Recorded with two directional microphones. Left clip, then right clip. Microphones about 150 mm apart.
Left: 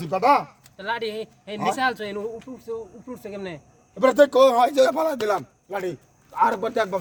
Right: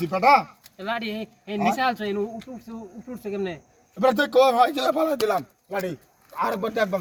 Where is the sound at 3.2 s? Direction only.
50° left (ahead or behind).